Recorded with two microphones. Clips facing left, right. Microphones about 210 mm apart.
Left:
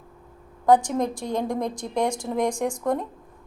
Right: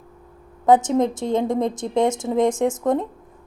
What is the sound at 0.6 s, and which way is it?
A woman's voice, 25° right (ahead or behind).